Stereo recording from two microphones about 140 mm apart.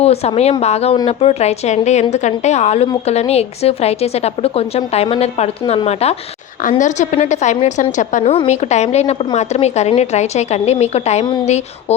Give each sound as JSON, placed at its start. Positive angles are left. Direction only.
{"t": 0.0, "sound": "a woman's voice", "side_deg": 45}
{"t": 6.6, "sound": "a woman's voice", "side_deg": 70}
{"t": 8.2, "sound": "a woman's voice", "side_deg": 45}